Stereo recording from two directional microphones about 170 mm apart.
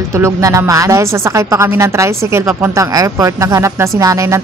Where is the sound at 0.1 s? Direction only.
20° right (ahead or behind).